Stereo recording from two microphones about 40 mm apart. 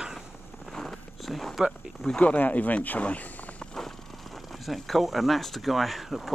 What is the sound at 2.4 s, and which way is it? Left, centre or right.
Speech, left.